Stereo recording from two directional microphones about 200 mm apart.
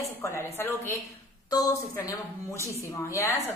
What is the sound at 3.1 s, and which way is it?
Speech, 15° left (ahead or behind).